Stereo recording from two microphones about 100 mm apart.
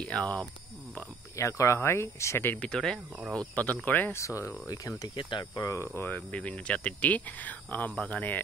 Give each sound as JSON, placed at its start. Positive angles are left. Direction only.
{"t": 0.0, "sound": "speech", "side_deg": 10}
{"t": 1.3, "sound": "speech", "side_deg": 30}
{"t": 2.7, "sound": "speech", "side_deg": 5}
{"t": 4.2, "sound": "cricket", "side_deg": 30}
{"t": 5.1, "sound": "cricket", "side_deg": 50}
{"t": 6.1, "sound": "speech", "side_deg": 15}